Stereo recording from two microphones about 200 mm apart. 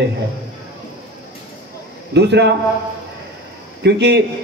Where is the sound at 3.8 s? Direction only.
60° right (ahead or behind).